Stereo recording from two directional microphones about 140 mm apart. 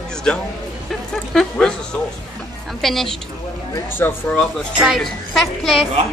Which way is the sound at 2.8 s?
Centre (ahead or behind).